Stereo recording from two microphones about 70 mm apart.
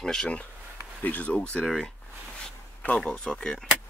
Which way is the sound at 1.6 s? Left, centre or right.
Centre.